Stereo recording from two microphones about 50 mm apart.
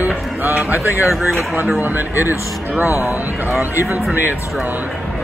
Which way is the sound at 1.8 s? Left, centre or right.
Right.